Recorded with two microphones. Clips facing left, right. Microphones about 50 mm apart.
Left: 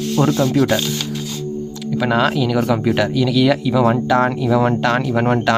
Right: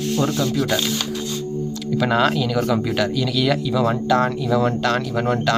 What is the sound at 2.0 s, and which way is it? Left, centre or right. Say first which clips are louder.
Speech: left 2 dB; centre.